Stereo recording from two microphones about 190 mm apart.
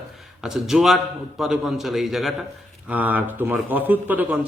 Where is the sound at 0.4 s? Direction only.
Centre (ahead or behind).